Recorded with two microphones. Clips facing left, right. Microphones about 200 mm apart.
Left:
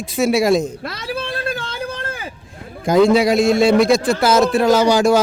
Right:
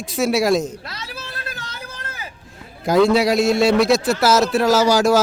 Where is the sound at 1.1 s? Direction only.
55° left (ahead or behind).